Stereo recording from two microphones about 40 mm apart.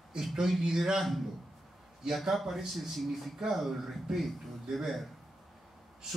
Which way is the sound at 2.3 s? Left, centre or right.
Centre.